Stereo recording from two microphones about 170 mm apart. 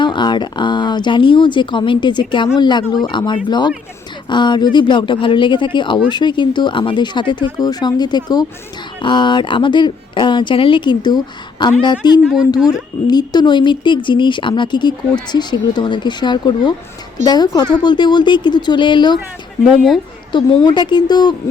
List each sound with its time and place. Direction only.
0.0 s speech: 25° left (ahead or behind)
12.2 s speech: 5° right (ahead or behind)
12.6 s speech: 25° left (ahead or behind)
20.3 s speech: 25° left (ahead or behind)